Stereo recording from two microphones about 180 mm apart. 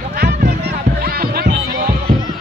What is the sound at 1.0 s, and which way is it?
Music, 55° right (ahead or behind).